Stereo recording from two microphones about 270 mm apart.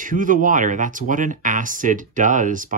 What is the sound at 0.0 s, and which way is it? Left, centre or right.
Speech, right.